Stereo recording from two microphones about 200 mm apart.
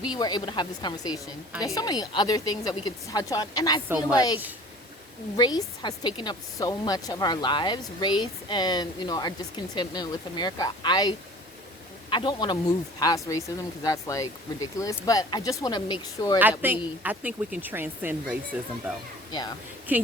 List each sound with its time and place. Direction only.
0.1 s a woman's voice: 20° left (ahead or behind)
5.4 s a woman's voice: 20° left (ahead or behind)
12.1 s a woman's voice: 25° left (ahead or behind)
16.4 s speech: 10° right (ahead or behind)